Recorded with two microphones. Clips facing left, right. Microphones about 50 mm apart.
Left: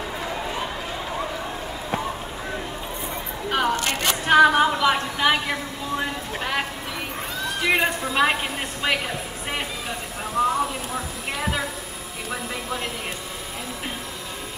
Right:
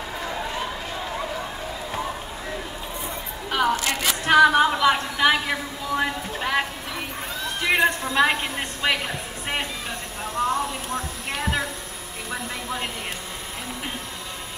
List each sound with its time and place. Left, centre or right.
0.2 s run: centre
3.4 s single-lens reflex camera: centre
3.7 s a sound: left
4.3 s a woman's voice: centre
7.4 s a woman's voice: centre
12.3 s a sound: centre